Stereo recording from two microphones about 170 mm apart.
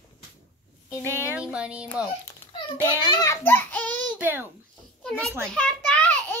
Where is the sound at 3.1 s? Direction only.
20° left (ahead or behind).